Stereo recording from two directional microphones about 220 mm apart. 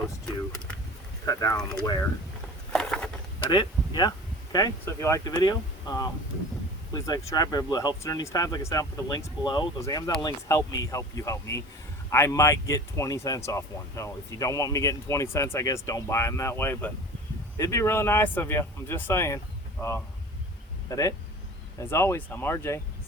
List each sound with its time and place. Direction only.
1.2 s speech: 15° left (ahead or behind)
2.7 s a sound: 5° left (ahead or behind)
3.5 s speech: 20° left (ahead or behind)
20.9 s speech: 15° left (ahead or behind)